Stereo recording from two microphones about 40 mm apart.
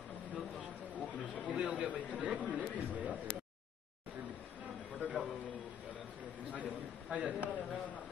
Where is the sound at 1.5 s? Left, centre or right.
Right.